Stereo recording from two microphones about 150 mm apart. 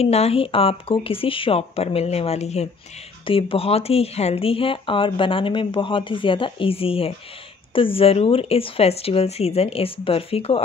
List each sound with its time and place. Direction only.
0.0 s speech: 45° left (ahead or behind)